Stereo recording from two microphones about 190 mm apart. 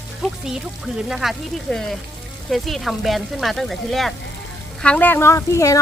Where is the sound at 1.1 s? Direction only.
Centre (ahead or behind).